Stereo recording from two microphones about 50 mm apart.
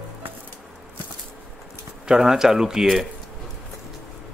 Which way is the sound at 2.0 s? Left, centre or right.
Centre.